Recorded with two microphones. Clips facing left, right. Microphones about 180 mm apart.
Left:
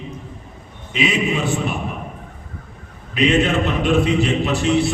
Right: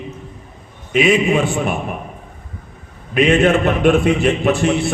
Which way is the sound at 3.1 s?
55° right (ahead or behind).